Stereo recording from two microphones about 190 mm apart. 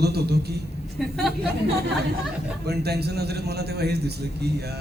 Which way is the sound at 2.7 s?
60° right (ahead or behind).